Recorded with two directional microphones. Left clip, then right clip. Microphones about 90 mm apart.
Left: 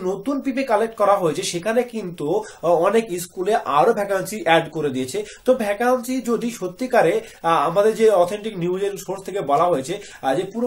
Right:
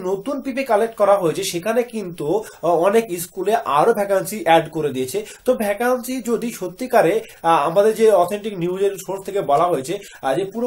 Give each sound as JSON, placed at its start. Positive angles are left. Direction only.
{"t": 0.6, "sound": "speech", "side_deg": -30}